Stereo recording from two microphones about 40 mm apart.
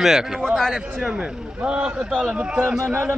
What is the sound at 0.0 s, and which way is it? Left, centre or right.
A man's voice, centre.